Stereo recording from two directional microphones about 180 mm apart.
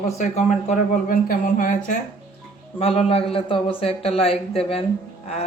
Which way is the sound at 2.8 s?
30° left (ahead or behind).